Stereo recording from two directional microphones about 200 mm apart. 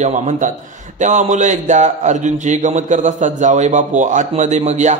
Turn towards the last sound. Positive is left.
turn(degrees=-35)  # may be behind; listen again after turning